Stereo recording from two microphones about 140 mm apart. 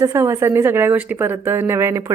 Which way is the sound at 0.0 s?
20° right (ahead or behind).